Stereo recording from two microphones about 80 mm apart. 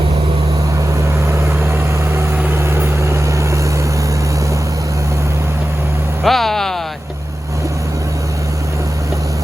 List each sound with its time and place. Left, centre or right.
1.4 s vehicle: right
6.2 s music: centre